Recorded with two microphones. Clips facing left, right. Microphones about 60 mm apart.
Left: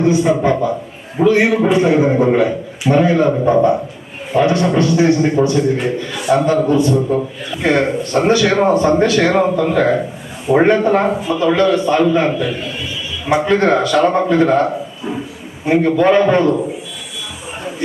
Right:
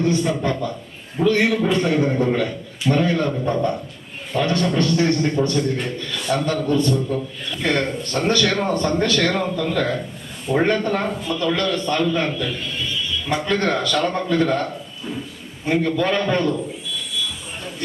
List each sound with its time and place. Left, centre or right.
0.0 s a man's voice: centre